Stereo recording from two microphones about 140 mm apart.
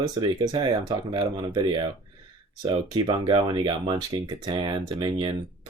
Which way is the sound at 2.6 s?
30° right (ahead or behind).